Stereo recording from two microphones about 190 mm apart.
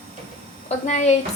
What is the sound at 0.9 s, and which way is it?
Speech, 40° left (ahead or behind).